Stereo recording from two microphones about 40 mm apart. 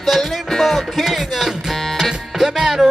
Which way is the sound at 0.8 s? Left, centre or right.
Centre.